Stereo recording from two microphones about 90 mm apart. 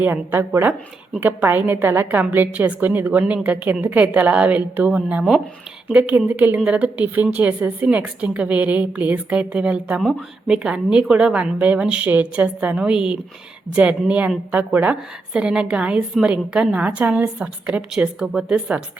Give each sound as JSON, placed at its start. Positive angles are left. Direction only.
{"t": 0.0, "sound": "a woman's voice", "side_deg": -20}
{"t": 10.0, "sound": "a woman's voice", "side_deg": 0}